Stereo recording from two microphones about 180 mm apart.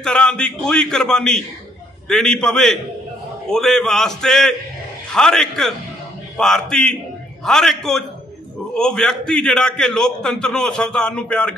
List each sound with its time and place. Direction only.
0.0 s a man's voice: 5° left (ahead or behind)